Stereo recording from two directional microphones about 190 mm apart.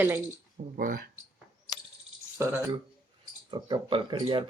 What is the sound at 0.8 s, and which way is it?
Speech, 45° right (ahead or behind).